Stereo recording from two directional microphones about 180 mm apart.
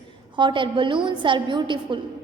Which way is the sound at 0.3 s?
25° right (ahead or behind).